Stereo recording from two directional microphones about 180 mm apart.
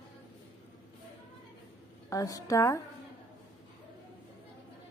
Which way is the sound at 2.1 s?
20° left (ahead or behind).